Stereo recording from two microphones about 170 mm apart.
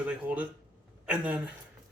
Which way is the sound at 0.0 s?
10° right (ahead or behind).